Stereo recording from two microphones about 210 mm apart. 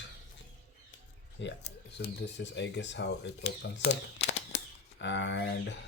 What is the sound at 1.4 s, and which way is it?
Speech, 55° left (ahead or behind).